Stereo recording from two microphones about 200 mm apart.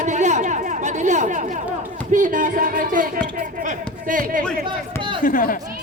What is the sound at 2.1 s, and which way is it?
Speech, 40° right (ahead or behind).